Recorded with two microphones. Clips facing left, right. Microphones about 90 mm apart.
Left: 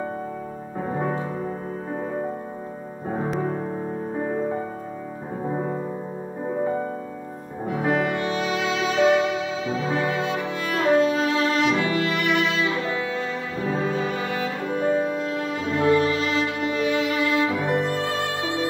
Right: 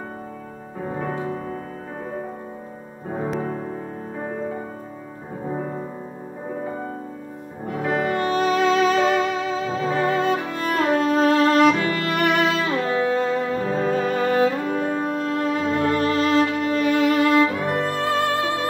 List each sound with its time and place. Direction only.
1.0 s music: 20° left (ahead or behind)
5.5 s music: 15° left (ahead or behind)
7.9 s music: 45° right (ahead or behind)